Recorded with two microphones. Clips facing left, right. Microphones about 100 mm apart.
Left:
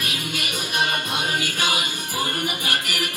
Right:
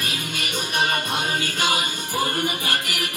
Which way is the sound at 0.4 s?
30° right (ahead or behind).